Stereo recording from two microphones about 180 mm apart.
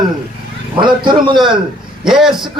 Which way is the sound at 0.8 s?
25° right (ahead or behind).